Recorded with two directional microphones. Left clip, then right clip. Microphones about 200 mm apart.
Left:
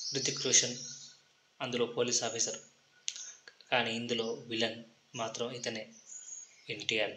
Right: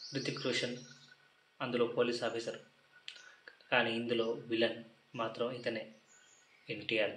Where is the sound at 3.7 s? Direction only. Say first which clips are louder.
Even; 30° left (ahead or behind).